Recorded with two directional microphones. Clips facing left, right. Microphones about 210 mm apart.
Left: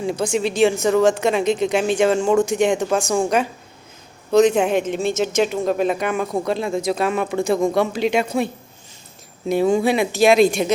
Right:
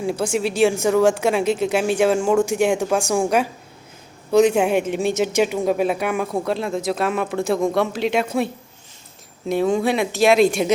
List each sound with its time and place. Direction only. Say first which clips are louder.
0.0 s a woman's voice: left 1 dB; 5° right (ahead or behind)
9.5 s a woman's voice: left 2 dB; centre (ahead or behind)